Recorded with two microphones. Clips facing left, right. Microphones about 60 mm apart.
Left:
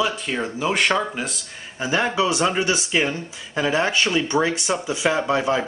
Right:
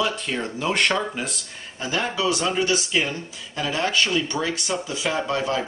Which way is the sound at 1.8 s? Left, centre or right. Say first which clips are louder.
Left 4 dB; left.